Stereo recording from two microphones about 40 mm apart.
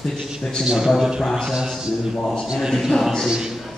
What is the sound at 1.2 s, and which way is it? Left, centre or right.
Speech, centre.